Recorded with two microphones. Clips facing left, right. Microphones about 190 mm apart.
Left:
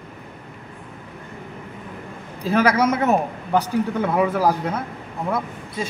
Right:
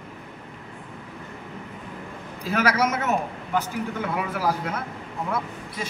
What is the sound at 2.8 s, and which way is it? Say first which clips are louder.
Speech: left 5 dB; 35° left (ahead or behind).